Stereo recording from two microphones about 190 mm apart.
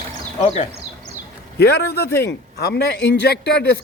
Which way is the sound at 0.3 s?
35° left (ahead or behind).